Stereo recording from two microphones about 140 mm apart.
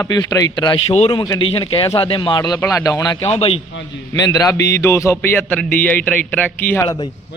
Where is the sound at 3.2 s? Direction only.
45° left (ahead or behind).